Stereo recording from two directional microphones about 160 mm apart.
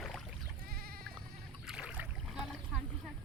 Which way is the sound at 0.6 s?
70° right (ahead or behind).